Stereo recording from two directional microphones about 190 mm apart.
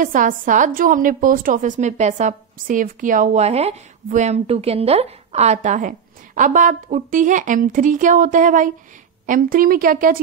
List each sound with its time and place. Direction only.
0.0 s a woman's voice: 45° right (ahead or behind)